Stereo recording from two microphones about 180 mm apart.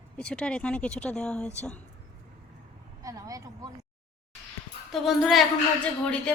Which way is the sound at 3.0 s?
20° right (ahead or behind).